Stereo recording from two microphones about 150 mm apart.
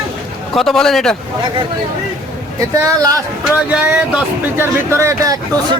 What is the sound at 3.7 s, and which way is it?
Speech, 10° right (ahead or behind).